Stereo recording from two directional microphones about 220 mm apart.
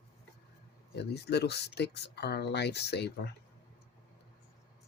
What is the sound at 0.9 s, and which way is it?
Speech, 50° left (ahead or behind).